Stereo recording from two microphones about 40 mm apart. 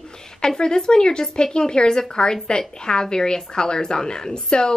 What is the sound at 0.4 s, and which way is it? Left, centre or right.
A woman's voice, centre.